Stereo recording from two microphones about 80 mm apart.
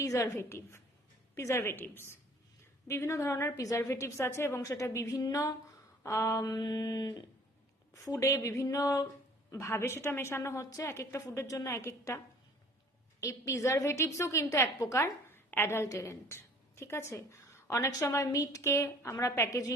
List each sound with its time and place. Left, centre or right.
0.0 s a woman's voice: left
4.6 s speech: left
6.0 s a sound: left
8.1 s speech: left
9.5 s a woman's voice: left